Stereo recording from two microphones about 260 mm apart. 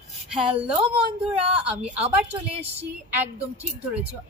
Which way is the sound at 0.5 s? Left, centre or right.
Right.